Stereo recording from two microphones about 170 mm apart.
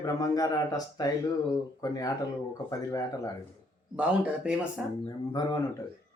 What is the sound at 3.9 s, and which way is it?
Speech, 5° right (ahead or behind).